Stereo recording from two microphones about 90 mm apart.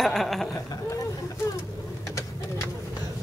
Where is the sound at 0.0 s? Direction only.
5° left (ahead or behind).